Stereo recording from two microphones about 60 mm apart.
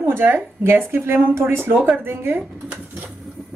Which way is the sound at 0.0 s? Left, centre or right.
Right.